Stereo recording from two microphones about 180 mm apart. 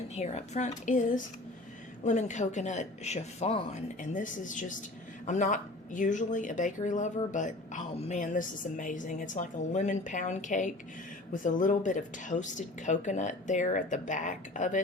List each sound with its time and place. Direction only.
0.1 s speech: 40° left (ahead or behind)